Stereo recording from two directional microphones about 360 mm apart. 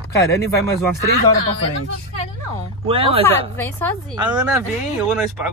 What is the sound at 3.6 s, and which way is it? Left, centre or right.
Speech, centre.